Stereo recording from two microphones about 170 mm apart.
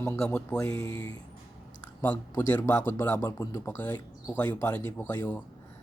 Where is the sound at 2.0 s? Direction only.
10° left (ahead or behind).